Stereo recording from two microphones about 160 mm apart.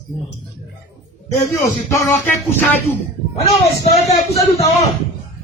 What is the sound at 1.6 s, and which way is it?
Speech, 20° left (ahead or behind).